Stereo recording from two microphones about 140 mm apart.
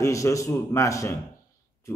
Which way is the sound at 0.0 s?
20° left (ahead or behind).